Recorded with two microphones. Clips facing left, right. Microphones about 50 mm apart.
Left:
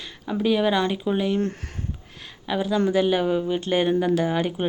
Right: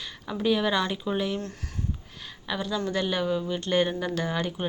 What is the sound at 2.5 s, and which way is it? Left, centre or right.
Speech, centre.